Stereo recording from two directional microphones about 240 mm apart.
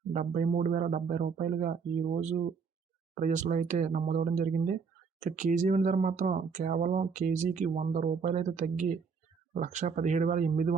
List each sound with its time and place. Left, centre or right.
0.1 s speech: right